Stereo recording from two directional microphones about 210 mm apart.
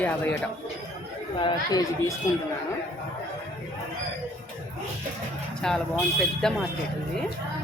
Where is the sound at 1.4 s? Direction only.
20° left (ahead or behind).